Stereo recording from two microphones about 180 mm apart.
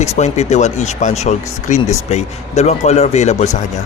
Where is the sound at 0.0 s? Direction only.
40° left (ahead or behind).